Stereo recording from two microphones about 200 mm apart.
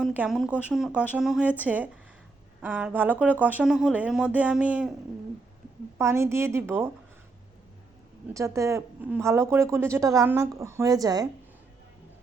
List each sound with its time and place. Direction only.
0.0 s a woman's voice: 5° right (ahead or behind)
6.0 s speech: 15° right (ahead or behind)
8.3 s speech: 15° right (ahead or behind)